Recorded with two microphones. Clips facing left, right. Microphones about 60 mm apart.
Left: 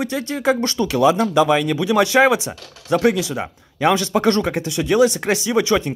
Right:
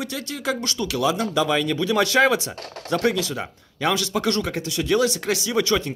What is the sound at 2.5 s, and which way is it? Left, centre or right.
Speech, right.